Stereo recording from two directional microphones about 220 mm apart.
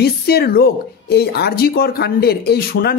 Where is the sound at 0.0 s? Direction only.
45° left (ahead or behind).